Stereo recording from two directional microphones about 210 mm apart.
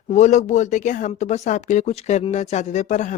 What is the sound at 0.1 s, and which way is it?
Speech, 35° left (ahead or behind).